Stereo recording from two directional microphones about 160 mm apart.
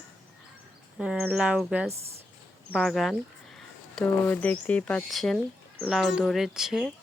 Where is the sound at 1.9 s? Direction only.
40° right (ahead or behind).